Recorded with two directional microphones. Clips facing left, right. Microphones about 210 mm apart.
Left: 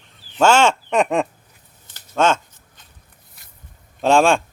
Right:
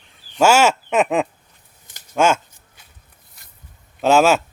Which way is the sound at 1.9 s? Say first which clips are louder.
Right 1 dB; 10° right (ahead or behind).